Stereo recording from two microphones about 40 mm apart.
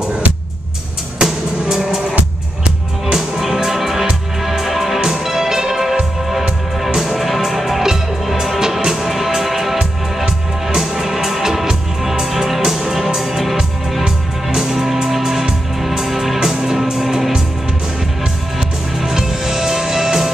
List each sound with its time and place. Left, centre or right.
1.2 s music: centre
3.1 s music: centre
9.8 s music: centre
18.6 s music: centre